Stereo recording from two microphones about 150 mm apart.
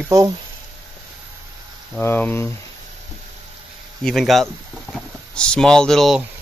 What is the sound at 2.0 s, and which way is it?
Speech, 15° left (ahead or behind).